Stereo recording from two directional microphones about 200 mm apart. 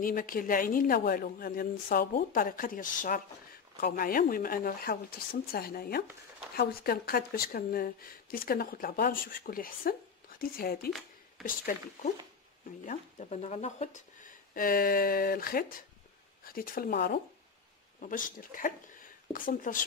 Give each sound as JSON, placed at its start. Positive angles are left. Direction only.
{"t": 0.0, "sound": "speech", "side_deg": 45}